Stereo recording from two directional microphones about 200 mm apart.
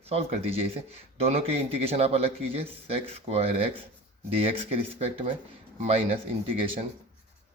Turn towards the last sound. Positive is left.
turn(degrees=-25)  # may be behind; listen again after turning